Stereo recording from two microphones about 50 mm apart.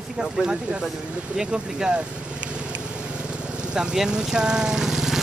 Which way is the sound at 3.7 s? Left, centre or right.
Centre.